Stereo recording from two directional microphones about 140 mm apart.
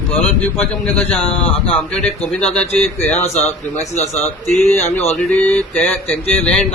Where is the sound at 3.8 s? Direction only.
55° left (ahead or behind).